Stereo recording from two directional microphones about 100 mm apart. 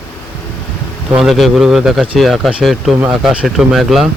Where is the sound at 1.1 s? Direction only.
Centre (ahead or behind).